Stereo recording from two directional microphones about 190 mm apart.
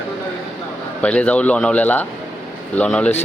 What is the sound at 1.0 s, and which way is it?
Speech, 5° left (ahead or behind).